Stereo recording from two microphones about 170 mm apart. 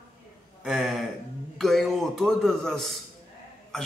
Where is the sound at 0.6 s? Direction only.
Centre (ahead or behind).